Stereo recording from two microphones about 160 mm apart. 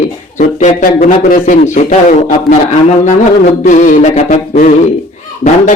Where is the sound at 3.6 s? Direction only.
50° left (ahead or behind).